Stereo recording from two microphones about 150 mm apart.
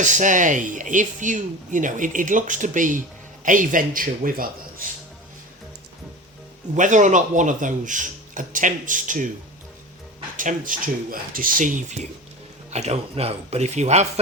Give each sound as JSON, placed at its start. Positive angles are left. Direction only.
{"t": 0.0, "sound": "speech", "side_deg": -55}
{"t": 6.7, "sound": "speech", "side_deg": -55}
{"t": 10.3, "sound": "speech", "side_deg": -65}
{"t": 12.7, "sound": "speech", "side_deg": -45}